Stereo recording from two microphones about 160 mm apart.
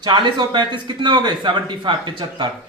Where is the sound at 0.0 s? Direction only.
30° right (ahead or behind).